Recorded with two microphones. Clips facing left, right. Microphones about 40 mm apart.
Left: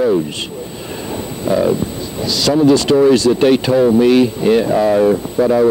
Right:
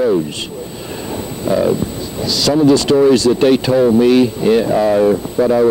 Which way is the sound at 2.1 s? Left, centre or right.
Left.